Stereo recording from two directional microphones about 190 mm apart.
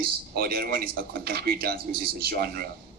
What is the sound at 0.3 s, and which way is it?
Speech, 55° right (ahead or behind).